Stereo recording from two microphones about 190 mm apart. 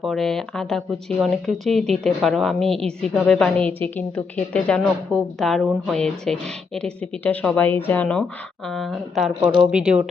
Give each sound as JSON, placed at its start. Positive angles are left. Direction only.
{"t": 0.0, "sound": "speech", "side_deg": 0}